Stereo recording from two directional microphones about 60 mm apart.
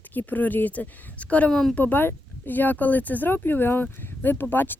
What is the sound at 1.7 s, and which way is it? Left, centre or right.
Speech, left.